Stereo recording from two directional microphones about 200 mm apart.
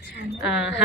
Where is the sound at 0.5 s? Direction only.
65° left (ahead or behind).